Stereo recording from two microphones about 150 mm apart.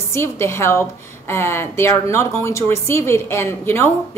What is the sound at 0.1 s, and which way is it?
A woman's voice, 15° left (ahead or behind).